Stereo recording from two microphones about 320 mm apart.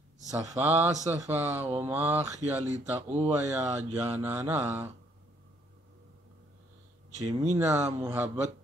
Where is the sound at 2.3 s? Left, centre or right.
Right.